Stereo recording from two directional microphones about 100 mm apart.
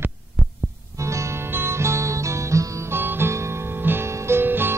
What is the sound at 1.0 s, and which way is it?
Music, 30° right (ahead or behind).